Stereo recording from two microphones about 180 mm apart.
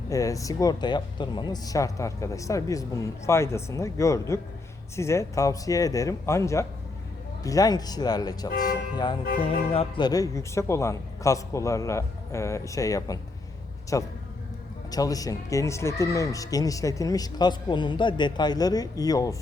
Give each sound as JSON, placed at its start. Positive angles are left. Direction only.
{"t": 0.1, "sound": "speech", "side_deg": 20}